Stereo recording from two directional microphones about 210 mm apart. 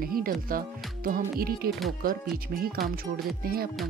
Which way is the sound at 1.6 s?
45° right (ahead or behind).